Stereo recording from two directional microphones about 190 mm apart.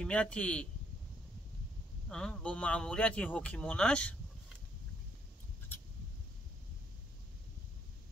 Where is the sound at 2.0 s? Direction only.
5° left (ahead or behind).